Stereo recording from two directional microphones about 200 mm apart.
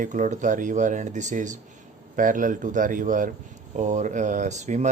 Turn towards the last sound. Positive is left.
turn(degrees=-35)  # may be behind; listen again after turning